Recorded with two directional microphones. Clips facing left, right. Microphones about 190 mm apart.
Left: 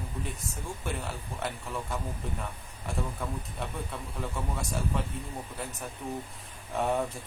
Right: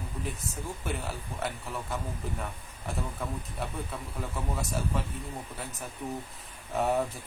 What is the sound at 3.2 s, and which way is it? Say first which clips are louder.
Speech: even; centre (ahead or behind).